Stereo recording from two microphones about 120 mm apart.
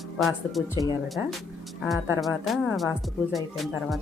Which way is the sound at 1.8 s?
Centre (ahead or behind).